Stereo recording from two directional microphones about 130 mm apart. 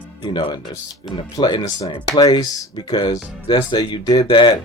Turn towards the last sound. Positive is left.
turn(degrees=35)  # may be behind; listen again after turning